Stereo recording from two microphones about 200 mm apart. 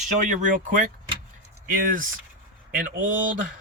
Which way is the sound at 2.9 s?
40° right (ahead or behind).